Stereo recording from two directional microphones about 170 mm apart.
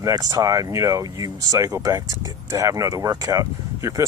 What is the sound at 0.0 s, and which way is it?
Speech, 20° right (ahead or behind).